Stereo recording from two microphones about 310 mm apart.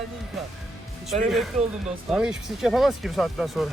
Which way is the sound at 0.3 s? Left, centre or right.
Centre.